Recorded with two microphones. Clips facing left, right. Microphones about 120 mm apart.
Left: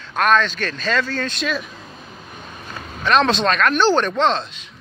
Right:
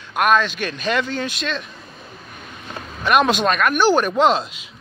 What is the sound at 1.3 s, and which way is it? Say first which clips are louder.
Speech: left 2 dB; 5° left (ahead or behind).